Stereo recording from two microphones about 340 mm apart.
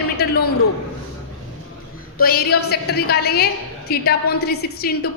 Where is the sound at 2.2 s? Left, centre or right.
Left.